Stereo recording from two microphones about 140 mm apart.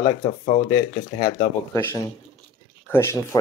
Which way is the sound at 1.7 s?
20° left (ahead or behind).